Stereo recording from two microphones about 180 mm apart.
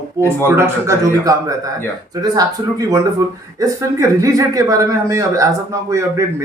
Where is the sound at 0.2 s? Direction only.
15° right (ahead or behind).